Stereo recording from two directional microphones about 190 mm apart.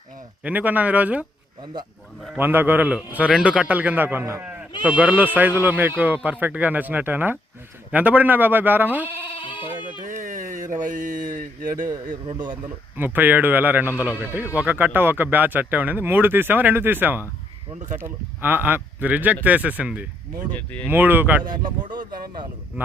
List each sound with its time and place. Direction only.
0.4 s speech: 10° right (ahead or behind)
1.7 s speech: 20° right (ahead or behind)
2.3 s speech: 10° right (ahead or behind)
9.4 s bleat: 25° left (ahead or behind)
10.1 s a sound: 40° right (ahead or behind)
12.3 s speech: 25° right (ahead or behind)
13.1 s speech: 10° right (ahead or behind)
20.5 s speech: 10° left (ahead or behind)
20.9 s speech: 10° right (ahead or behind)
21.8 s speech: 25° right (ahead or behind)